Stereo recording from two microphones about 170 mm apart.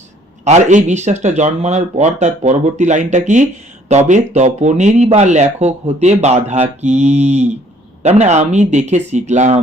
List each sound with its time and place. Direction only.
0.4 s speech: 40° right (ahead or behind)